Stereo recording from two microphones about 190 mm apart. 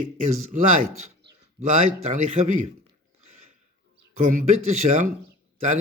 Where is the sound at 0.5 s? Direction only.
40° right (ahead or behind).